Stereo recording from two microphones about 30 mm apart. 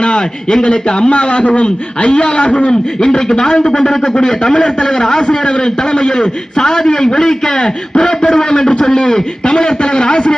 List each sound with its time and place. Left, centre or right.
0.0 s a man's voice: left
3.0 s a man's voice: left